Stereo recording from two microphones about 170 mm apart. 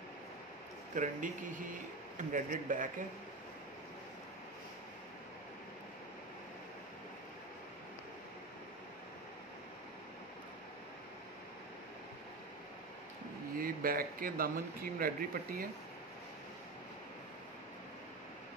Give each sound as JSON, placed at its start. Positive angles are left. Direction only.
{"t": 0.9, "sound": "a man's voice", "side_deg": -50}
{"t": 13.6, "sound": "speech", "side_deg": -60}